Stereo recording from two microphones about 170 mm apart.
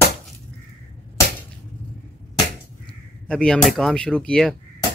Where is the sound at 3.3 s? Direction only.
5° left (ahead or behind).